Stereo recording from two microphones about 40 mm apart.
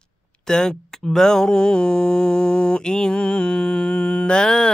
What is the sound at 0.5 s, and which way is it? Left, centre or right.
Speech, centre.